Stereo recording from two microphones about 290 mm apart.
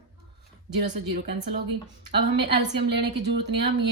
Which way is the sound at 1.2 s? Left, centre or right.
Right.